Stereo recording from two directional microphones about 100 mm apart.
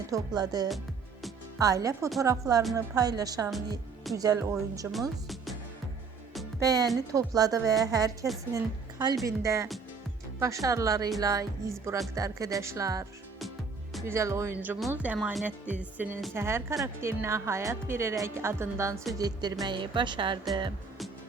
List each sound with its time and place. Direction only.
0.1 s speech: 40° right (ahead or behind)
6.7 s speech: 35° right (ahead or behind)
14.1 s speech: 30° right (ahead or behind)
14.5 s speech: 20° right (ahead or behind)
19.1 s speech: 40° right (ahead or behind)
19.6 s a woman's voice: 55° right (ahead or behind)